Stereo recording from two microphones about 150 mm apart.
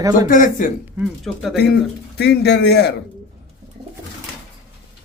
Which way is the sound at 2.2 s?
90° left.